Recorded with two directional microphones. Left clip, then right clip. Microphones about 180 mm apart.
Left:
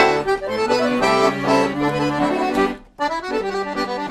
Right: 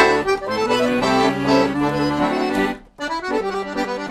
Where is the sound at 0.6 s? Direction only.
55° right (ahead or behind).